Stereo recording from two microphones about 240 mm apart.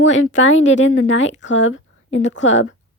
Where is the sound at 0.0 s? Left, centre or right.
Left.